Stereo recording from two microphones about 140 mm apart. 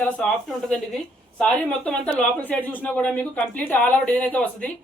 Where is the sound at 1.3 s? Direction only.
5° left (ahead or behind).